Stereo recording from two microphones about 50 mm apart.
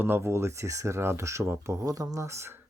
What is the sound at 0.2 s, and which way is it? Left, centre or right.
Speech, right.